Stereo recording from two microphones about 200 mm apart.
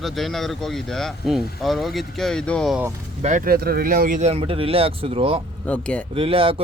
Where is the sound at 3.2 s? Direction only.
40° right (ahead or behind).